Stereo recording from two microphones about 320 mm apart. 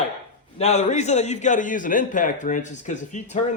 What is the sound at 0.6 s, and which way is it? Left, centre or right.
A man's voice, centre.